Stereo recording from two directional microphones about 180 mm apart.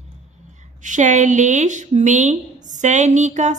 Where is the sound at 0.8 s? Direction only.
45° right (ahead or behind).